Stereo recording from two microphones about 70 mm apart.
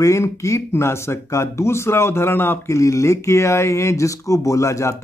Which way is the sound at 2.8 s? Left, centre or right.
Left.